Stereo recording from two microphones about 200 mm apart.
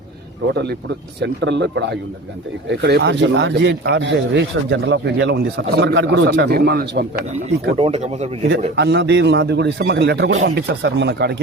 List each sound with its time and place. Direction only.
0.5 s a man's voice: 55° right (ahead or behind)
7.8 s speech: 35° right (ahead or behind)
8.4 s a man's voice: 55° right (ahead or behind)